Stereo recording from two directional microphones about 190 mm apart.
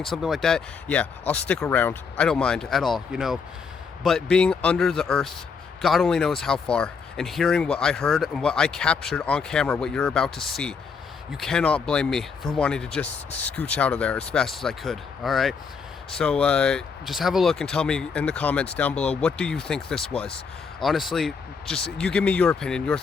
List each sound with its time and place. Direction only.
0.0 s speech: centre (ahead or behind)